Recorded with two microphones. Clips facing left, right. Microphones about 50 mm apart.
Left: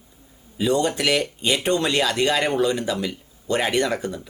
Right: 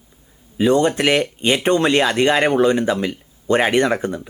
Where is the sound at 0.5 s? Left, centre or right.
Right.